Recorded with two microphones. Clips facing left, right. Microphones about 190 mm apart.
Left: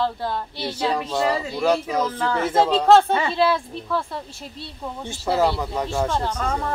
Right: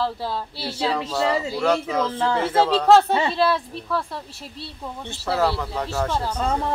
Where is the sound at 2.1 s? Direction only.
25° right (ahead or behind).